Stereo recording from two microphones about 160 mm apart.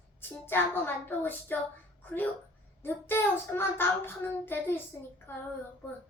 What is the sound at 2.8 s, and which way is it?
Child singing, 15° left (ahead or behind).